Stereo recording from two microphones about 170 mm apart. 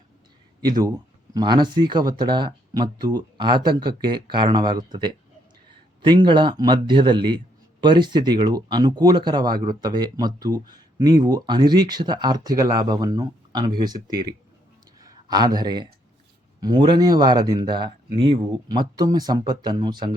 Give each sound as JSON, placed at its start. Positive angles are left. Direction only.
{"t": 0.6, "sound": "speech", "side_deg": -25}